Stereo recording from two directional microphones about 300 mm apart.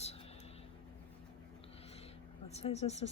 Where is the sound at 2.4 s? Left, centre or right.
Left.